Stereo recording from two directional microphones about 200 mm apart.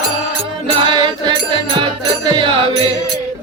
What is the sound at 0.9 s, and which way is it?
Music, 20° right (ahead or behind).